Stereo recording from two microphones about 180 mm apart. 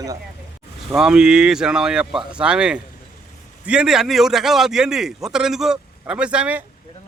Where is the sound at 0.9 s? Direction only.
5° right (ahead or behind).